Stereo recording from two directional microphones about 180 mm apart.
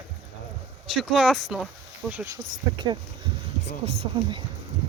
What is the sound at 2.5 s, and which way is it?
Speech, 25° right (ahead or behind).